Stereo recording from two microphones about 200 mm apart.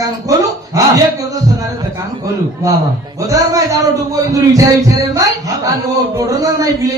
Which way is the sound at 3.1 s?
15° right (ahead or behind).